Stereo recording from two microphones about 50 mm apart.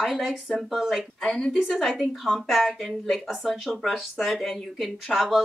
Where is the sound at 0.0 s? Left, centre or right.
Centre.